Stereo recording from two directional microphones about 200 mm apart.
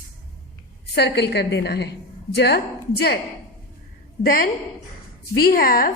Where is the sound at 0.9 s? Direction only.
55° left (ahead or behind).